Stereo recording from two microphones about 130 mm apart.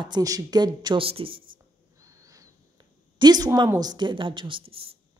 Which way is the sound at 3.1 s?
30° right (ahead or behind).